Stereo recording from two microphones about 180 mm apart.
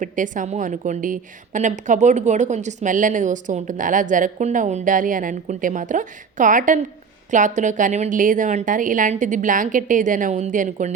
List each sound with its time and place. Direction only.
0.0 s a woman's voice: 45° right (ahead or behind)